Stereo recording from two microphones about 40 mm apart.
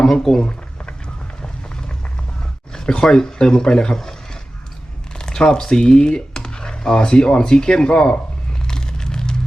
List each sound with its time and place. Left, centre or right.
0.0 s speech: centre
2.7 s speech: centre
5.1 s speech: centre
8.6 s a sound: centre